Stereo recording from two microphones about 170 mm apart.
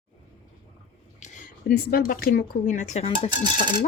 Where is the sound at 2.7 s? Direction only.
45° left (ahead or behind).